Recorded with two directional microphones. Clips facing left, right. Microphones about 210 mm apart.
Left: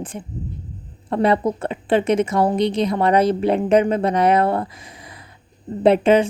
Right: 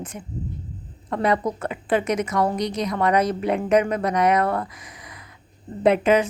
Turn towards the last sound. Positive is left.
turn(degrees=30)  # may be behind; listen again after turning